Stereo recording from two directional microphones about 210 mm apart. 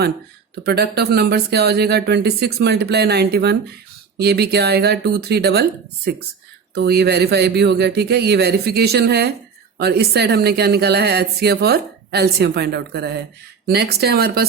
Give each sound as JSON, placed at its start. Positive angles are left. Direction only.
{"t": 0.6, "sound": "speech", "side_deg": -50}
{"t": 6.7, "sound": "speech", "side_deg": -50}